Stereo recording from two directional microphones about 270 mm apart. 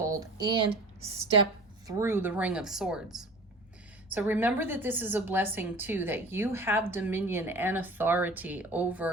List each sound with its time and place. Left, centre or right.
0.0 s speech: centre
1.9 s a woman's voice: centre